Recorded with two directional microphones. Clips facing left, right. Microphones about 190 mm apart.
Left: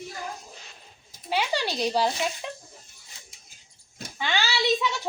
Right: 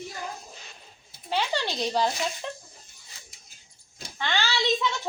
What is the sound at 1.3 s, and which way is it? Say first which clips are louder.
A child's voice: left 1 dB; 10° left (ahead or behind).